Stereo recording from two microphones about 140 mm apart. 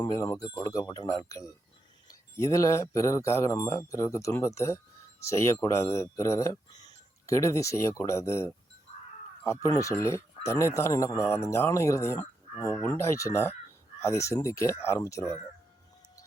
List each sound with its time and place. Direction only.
0.0 s speech: 25° left (ahead or behind)
9.6 s speech: 25° left (ahead or behind)